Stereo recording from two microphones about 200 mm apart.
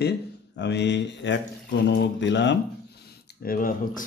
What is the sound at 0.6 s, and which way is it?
Speech, 60° left (ahead or behind).